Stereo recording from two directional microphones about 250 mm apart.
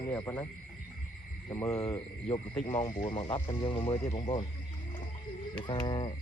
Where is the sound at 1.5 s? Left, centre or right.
Centre.